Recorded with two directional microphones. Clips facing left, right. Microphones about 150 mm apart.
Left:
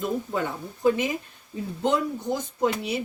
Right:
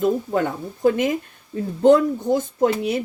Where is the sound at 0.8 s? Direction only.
55° right (ahead or behind).